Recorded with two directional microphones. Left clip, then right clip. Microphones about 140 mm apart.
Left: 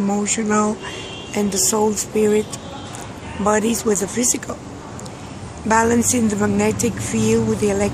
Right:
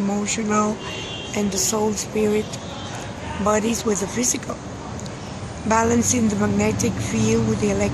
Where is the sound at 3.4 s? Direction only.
20° left (ahead or behind).